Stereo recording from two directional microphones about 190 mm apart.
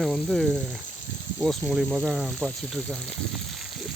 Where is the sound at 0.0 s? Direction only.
Centre (ahead or behind).